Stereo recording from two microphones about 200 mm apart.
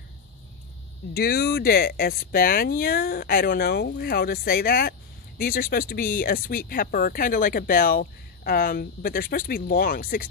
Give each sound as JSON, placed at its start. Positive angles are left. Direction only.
{"t": 1.1, "sound": "speech", "side_deg": 50}